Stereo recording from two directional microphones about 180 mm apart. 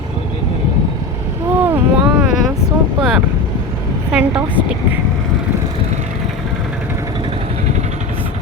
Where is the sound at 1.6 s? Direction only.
10° right (ahead or behind).